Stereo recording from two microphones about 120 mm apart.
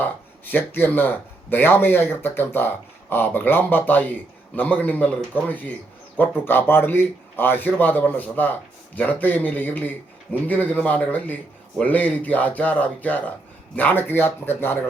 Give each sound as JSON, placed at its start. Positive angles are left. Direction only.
{"t": 0.0, "sound": "speech", "side_deg": 15}